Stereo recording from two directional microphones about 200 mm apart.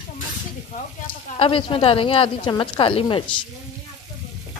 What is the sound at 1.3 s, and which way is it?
A woman's voice, 25° left (ahead or behind).